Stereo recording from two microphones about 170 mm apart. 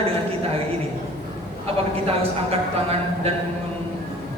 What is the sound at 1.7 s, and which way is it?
Speech, 35° right (ahead or behind).